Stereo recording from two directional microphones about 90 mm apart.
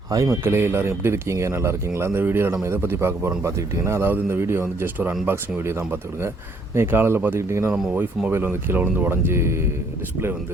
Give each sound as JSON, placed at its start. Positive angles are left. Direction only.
{"t": 0.1, "sound": "speech", "side_deg": -45}
{"t": 0.4, "sound": "speech", "side_deg": -25}
{"t": 7.7, "sound": "speech", "side_deg": -15}
{"t": 8.3, "sound": "speech", "side_deg": -25}